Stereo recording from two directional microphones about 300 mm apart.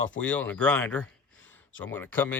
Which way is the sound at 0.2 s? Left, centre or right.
Centre.